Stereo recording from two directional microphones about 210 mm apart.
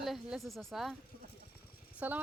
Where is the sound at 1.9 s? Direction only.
5° right (ahead or behind).